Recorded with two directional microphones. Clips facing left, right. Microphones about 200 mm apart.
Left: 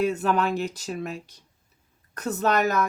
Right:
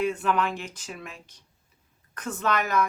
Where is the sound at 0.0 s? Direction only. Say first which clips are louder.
Left 2 dB; 40° left (ahead or behind).